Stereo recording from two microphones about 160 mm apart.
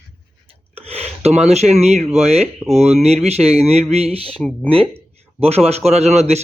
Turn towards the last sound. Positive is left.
turn(degrees=-45)  # may be behind; listen again after turning